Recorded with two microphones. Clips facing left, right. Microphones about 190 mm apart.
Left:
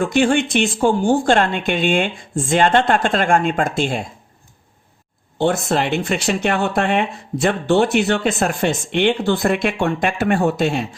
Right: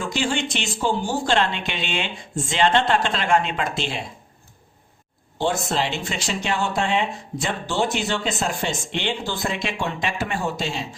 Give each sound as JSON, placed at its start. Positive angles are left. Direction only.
{"t": 0.0, "sound": "speech", "side_deg": 55}
{"t": 5.4, "sound": "speech", "side_deg": 55}